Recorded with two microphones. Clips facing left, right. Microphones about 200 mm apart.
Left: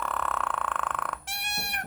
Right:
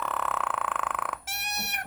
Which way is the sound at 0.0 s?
5° right (ahead or behind).